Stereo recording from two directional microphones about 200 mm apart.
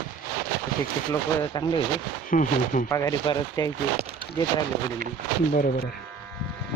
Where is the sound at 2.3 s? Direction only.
40° left (ahead or behind).